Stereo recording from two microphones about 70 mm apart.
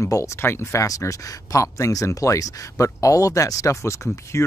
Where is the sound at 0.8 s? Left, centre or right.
Left.